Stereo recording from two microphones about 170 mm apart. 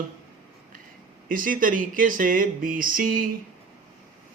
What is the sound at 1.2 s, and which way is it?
Speech, 55° right (ahead or behind).